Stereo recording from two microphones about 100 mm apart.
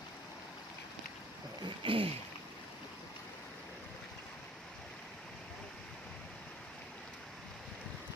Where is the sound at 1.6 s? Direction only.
60° right (ahead or behind).